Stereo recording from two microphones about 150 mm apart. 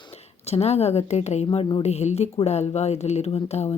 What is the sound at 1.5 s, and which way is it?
Speech, 35° left (ahead or behind).